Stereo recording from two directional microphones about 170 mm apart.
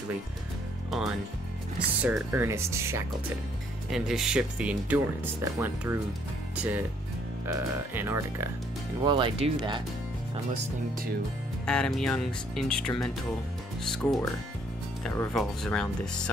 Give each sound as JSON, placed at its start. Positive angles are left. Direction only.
{"t": 0.8, "sound": "speech", "side_deg": 0}
{"t": 3.9, "sound": "speech", "side_deg": -5}
{"t": 9.0, "sound": "speech", "side_deg": -30}
{"t": 11.6, "sound": "speech", "side_deg": 5}